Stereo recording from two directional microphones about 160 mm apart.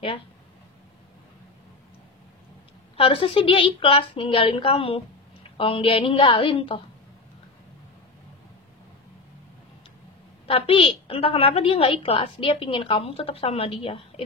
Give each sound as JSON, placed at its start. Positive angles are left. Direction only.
{"t": 3.0, "sound": "a woman's voice", "side_deg": 35}
{"t": 10.4, "sound": "a woman's voice", "side_deg": 35}